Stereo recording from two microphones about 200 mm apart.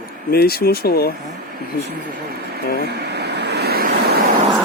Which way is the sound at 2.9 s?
55° right (ahead or behind).